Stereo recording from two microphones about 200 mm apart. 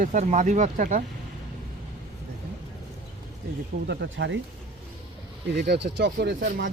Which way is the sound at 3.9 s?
65° right (ahead or behind).